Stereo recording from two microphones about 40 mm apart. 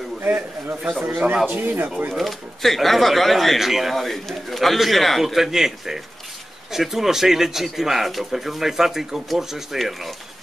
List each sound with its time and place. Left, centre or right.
0.2 s a man's voice: right
1.1 s speech: right
1.5 s speech: right
2.1 s a man's voice: centre
3.9 s a man's voice: centre